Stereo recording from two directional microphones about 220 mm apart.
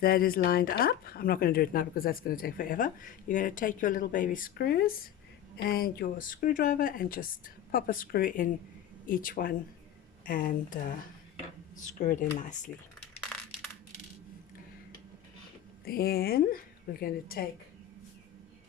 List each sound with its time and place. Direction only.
0.0 s speech: 40° left (ahead or behind)
11.9 s speech: 35° left (ahead or behind)
15.8 s speech: 45° left (ahead or behind)